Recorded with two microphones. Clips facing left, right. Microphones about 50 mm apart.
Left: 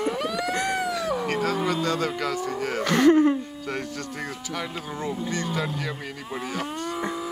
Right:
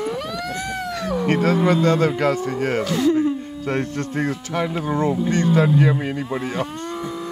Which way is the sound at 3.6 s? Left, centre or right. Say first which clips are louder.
Right 7 dB; right.